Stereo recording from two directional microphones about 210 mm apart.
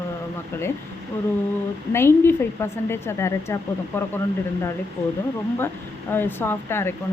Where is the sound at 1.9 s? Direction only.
10° left (ahead or behind).